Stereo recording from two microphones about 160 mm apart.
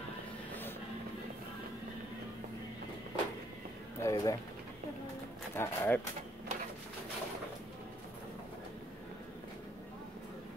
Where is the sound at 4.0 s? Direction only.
20° left (ahead or behind).